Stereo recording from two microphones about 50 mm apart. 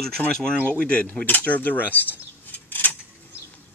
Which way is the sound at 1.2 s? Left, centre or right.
Left.